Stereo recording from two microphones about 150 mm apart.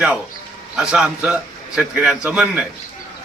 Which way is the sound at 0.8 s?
5° right (ahead or behind).